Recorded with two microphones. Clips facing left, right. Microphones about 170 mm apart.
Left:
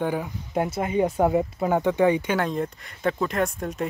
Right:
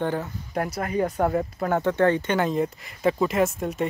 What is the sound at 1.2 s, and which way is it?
Speech, 10° left (ahead or behind).